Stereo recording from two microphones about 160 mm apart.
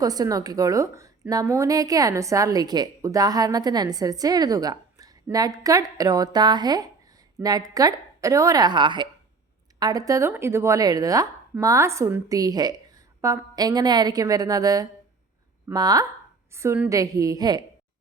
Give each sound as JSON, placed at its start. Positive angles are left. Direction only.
{"t": 0.0, "sound": "a woman's voice", "side_deg": -25}